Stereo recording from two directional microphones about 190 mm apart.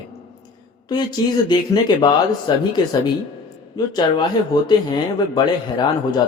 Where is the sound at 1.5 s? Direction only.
25° left (ahead or behind).